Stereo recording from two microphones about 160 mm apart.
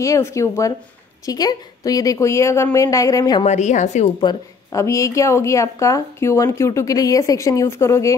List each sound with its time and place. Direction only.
0.0 s a woman's voice: 20° left (ahead or behind)
3.4 s a woman's voice: 45° left (ahead or behind)
4.2 s a woman's voice: 25° left (ahead or behind)